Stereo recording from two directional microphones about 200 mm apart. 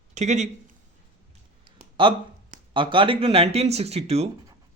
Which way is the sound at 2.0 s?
25° right (ahead or behind).